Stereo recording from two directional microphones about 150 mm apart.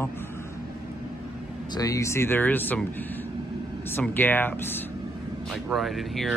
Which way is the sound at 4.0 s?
15° left (ahead or behind).